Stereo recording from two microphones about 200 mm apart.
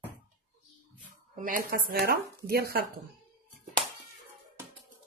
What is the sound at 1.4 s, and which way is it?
Speech, 45° right (ahead or behind).